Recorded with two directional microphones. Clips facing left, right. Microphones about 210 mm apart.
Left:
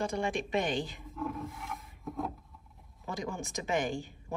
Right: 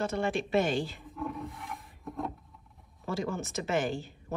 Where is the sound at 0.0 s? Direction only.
15° left (ahead or behind).